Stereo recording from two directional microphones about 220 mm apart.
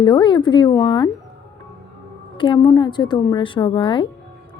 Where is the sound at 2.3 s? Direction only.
20° left (ahead or behind).